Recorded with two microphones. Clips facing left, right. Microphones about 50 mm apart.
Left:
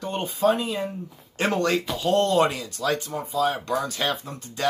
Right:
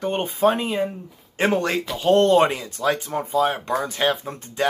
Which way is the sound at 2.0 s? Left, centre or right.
Right.